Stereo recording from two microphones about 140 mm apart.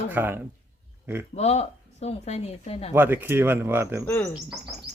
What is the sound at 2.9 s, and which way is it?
Speech, 15° right (ahead or behind).